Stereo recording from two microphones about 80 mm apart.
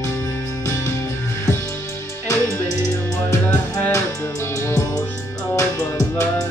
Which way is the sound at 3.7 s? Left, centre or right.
Left.